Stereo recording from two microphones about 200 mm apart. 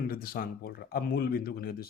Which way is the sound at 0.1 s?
45° left (ahead or behind).